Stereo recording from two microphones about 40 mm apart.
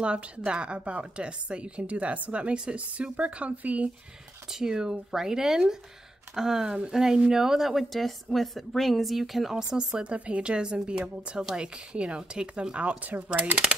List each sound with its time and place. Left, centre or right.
0.0 s a woman's voice: right
4.5 s a woman's voice: centre
9.6 s speech: right
13.1 s speech: right